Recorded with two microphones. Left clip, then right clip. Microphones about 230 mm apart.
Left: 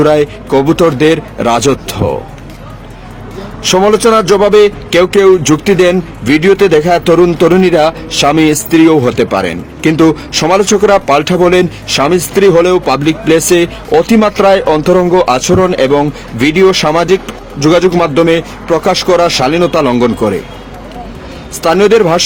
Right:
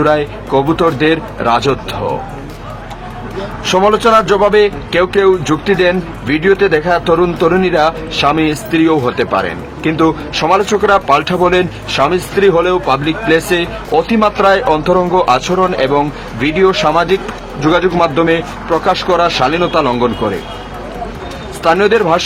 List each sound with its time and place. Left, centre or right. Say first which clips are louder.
0.0 s a man's voice: left 4 dB; left
3.6 s a man's voice: left 3 dB; left
21.6 s a man's voice: left 3 dB; left